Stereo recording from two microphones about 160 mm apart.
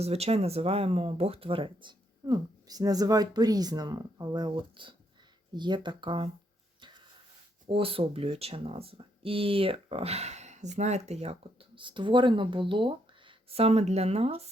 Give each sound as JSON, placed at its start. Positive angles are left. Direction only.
{"t": 0.0, "sound": "speech", "side_deg": -40}
{"t": 7.7, "sound": "speech", "side_deg": -35}